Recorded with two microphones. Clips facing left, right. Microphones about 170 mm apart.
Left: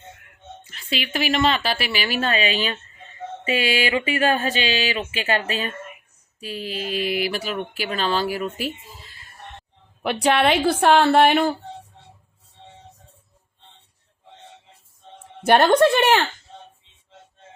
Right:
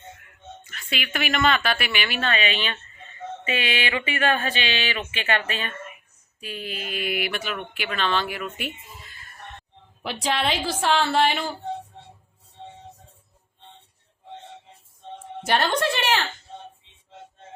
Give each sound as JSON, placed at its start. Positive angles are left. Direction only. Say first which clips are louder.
{"t": 0.6, "sound": "speech", "louder": "left 4 dB", "side_deg": 30}
{"t": 10.0, "sound": "a woman's voice", "louder": "left 7 dB", "side_deg": 60}
{"t": 15.4, "sound": "a woman's voice", "louder": "left 8 dB", "side_deg": 55}